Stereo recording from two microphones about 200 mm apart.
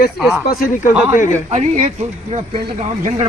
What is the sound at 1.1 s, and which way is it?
Speech, 40° left (ahead or behind).